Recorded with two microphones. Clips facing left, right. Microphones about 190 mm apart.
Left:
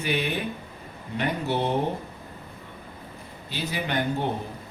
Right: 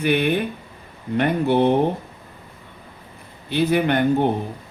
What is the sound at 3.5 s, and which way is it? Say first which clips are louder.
Speech: right 12 dB; 60° right (ahead or behind).